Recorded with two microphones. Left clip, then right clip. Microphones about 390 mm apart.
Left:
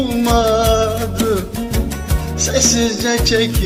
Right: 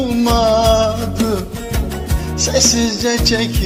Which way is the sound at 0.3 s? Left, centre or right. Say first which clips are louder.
Right 2 dB; centre.